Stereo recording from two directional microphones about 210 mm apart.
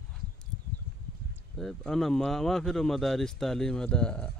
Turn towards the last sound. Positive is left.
turn(degrees=5)  # may be behind; listen again after turning